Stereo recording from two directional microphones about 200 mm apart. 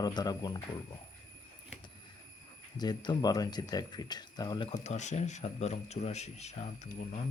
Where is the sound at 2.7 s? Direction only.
20° left (ahead or behind).